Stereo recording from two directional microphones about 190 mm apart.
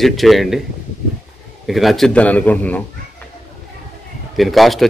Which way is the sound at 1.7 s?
Centre (ahead or behind).